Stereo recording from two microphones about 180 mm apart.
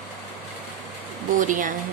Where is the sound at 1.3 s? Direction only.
45° right (ahead or behind).